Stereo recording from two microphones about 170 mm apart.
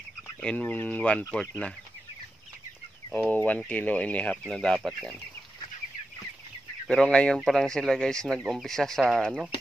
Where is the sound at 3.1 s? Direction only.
10° left (ahead or behind).